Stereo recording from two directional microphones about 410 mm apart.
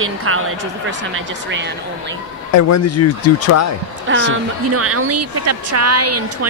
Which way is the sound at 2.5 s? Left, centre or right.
Left.